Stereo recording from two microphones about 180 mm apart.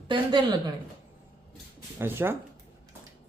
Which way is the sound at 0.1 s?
25° right (ahead or behind).